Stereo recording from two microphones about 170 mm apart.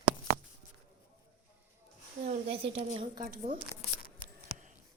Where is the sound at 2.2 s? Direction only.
35° right (ahead or behind).